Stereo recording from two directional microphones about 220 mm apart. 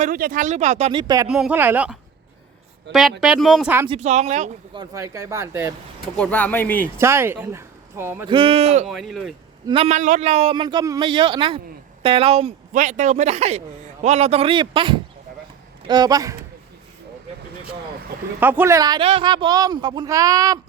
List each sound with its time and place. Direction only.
0.0 s speech: 40° right (ahead or behind); by 1.3 s 15° right (ahead or behind)
1.3 s speech: 5° right (ahead or behind)
3.2 s speech: centre (ahead or behind)
3.8 s speech: 30° right (ahead or behind)
4.8 s speech: 15° right (ahead or behind)
6.1 s speech: 5° left (ahead or behind)
7.0 s speech: 10° right (ahead or behind)
8.3 s a man's voice: 25° right (ahead or behind)
8.9 s speech: centre (ahead or behind)
9.6 s a man's voice: 25° right (ahead or behind)
18.3 s speech: 10° right (ahead or behind)